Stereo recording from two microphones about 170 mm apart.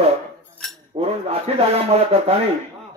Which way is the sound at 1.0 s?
35° right (ahead or behind).